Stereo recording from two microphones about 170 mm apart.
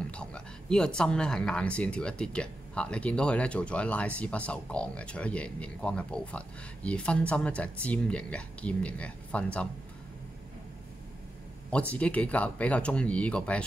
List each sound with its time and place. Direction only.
0.0 s speech: 5° left (ahead or behind)
11.9 s speech: 10° left (ahead or behind)